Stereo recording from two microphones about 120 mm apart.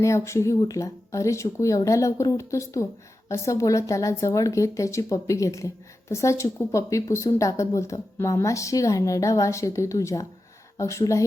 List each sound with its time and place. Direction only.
0.0 s a woman's voice: 25° left (ahead or behind)